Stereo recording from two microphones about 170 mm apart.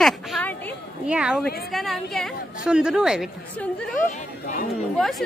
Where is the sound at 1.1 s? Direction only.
5° right (ahead or behind).